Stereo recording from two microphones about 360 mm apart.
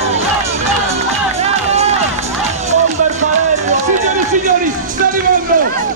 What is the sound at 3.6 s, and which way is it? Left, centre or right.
Run, centre.